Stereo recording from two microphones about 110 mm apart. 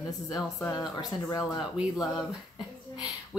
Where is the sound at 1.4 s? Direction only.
5° right (ahead or behind).